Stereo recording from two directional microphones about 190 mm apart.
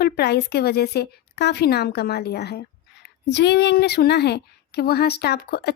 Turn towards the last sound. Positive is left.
turn(degrees=55)  # may be behind; listen again after turning